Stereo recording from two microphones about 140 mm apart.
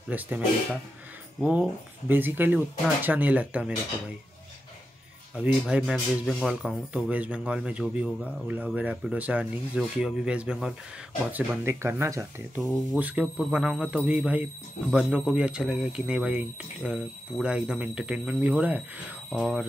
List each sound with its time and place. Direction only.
0.1 s speech: 10° right (ahead or behind)
1.4 s speech: 10° right (ahead or behind)
5.3 s speech: 5° right (ahead or behind)